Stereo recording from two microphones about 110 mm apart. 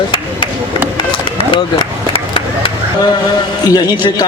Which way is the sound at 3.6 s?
40° left (ahead or behind).